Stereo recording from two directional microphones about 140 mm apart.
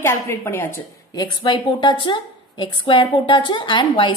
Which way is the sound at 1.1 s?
30° left (ahead or behind).